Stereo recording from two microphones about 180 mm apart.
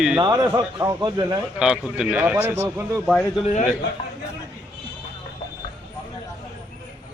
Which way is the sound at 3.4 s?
40° left (ahead or behind).